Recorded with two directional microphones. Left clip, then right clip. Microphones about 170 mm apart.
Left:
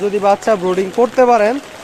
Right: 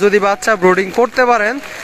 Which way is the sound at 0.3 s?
15° right (ahead or behind).